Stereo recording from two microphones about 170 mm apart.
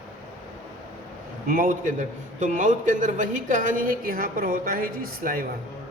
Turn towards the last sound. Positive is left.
turn(degrees=-55)  # may be behind; listen again after turning